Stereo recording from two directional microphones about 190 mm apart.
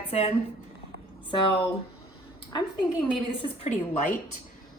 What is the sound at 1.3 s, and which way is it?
Speech, 25° left (ahead or behind).